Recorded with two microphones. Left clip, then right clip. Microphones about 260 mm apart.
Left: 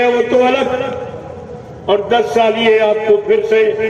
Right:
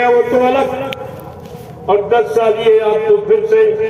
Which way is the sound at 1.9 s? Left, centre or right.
Left.